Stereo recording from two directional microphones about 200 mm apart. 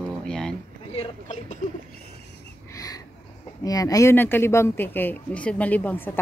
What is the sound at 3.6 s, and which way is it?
Speech, 15° left (ahead or behind).